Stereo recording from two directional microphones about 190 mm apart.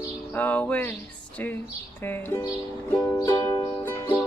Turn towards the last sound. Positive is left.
turn(degrees=10)  # may be behind; listen again after turning